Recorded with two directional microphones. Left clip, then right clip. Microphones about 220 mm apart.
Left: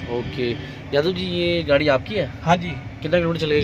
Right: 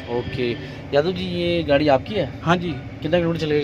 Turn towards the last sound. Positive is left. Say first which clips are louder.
# left 1 dB
turn(degrees=5)  # may be behind; listen again after turning